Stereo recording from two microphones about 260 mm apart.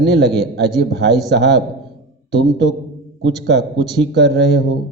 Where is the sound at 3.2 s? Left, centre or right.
Right.